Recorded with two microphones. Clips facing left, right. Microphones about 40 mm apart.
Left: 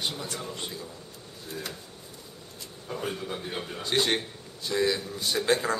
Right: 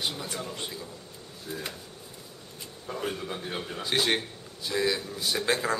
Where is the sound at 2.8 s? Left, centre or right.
Centre.